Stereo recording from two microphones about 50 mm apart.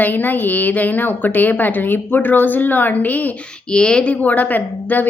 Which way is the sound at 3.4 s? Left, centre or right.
Centre.